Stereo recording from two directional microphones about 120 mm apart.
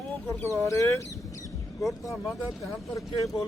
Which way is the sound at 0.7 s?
25° left (ahead or behind).